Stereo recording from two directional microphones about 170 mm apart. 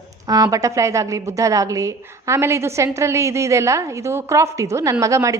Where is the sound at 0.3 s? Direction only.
20° right (ahead or behind).